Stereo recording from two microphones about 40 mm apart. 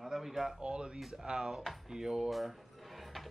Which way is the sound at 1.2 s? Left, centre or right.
Centre.